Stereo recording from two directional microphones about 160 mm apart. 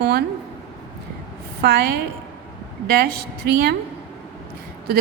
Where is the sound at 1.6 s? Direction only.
90° right.